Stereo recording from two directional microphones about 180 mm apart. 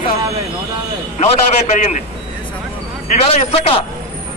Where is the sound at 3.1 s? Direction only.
35° left (ahead or behind).